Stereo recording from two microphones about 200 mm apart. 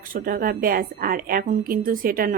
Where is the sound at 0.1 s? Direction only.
45° right (ahead or behind).